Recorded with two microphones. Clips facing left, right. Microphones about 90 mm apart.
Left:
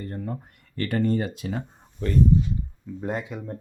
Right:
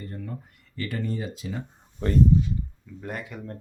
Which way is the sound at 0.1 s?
45° left (ahead or behind).